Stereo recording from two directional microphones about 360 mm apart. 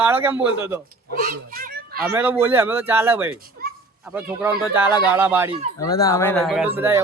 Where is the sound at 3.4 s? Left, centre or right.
Right.